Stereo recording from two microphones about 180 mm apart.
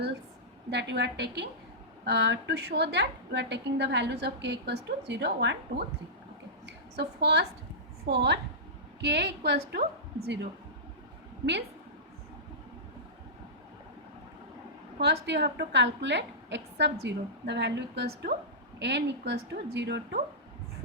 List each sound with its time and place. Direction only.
0.7 s a woman's voice: 70° right (ahead or behind)
14.9 s a woman's voice: 65° right (ahead or behind)